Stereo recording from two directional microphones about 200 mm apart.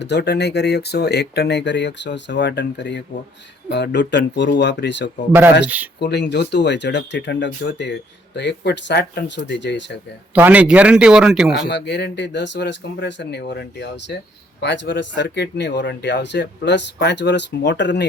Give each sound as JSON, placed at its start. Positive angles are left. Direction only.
{"t": 0.0, "sound": "speech", "side_deg": 60}
{"t": 5.6, "sound": "speech", "side_deg": -10}
{"t": 6.0, "sound": "speech", "side_deg": 55}
{"t": 10.3, "sound": "a man's voice", "side_deg": -10}
{"t": 11.7, "sound": "speech", "side_deg": 60}